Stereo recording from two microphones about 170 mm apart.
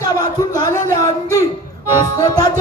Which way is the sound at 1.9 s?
20° left (ahead or behind).